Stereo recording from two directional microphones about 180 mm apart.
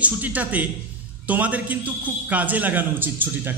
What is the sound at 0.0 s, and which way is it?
A man's voice, 10° right (ahead or behind).